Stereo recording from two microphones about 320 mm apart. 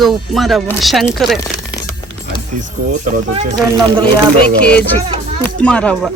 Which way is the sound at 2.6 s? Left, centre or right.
Right.